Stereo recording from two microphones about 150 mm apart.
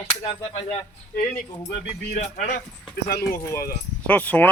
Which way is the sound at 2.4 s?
90° left.